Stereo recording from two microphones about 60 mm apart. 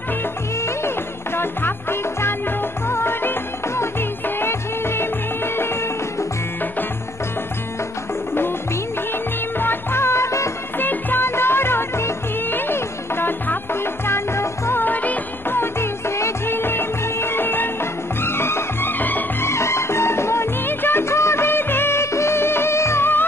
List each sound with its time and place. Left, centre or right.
0.6 s music: left
9.6 s music: left
10.8 s music: left
14.8 s music: left
15.5 s music: left
16.5 s music: left
19.4 s music: left